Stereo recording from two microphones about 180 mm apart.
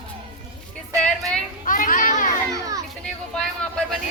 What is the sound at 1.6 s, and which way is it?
Children playing, 45° left (ahead or behind).